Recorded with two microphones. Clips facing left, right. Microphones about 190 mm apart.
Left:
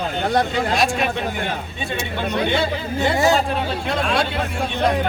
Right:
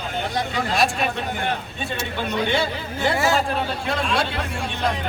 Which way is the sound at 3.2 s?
25° left (ahead or behind).